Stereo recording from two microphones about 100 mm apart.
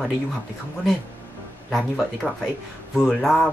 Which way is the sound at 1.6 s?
Centre (ahead or behind).